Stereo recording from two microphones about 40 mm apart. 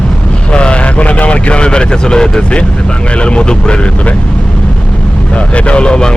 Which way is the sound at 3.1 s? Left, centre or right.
Left.